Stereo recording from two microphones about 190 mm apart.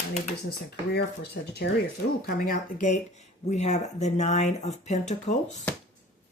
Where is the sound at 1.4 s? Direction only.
65° left (ahead or behind).